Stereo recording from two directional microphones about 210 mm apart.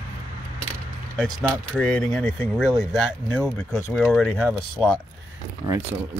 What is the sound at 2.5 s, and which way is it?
Speech, 5° right (ahead or behind).